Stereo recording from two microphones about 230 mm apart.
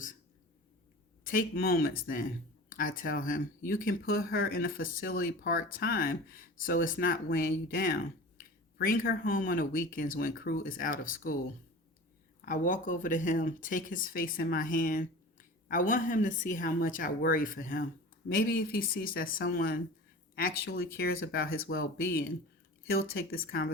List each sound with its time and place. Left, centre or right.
1.2 s speech: left
12.5 s speech: left